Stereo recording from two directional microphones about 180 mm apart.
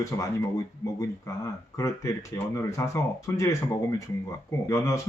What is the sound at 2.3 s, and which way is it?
Speech, 15° left (ahead or behind).